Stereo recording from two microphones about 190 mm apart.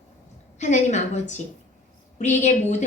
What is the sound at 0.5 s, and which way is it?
A woman's voice, 40° left (ahead or behind).